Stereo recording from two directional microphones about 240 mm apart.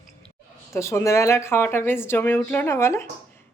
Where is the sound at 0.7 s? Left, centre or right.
Centre.